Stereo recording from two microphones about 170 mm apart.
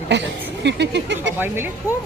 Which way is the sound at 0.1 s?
90° right.